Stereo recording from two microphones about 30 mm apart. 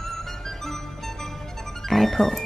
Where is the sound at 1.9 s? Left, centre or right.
Centre.